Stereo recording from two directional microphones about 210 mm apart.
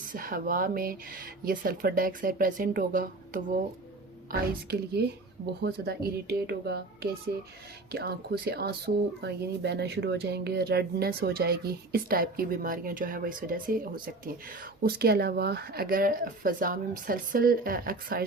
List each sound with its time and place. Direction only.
0.0 s speech: 40° right (ahead or behind)